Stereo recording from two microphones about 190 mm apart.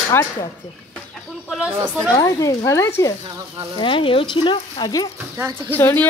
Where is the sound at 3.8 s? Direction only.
25° left (ahead or behind).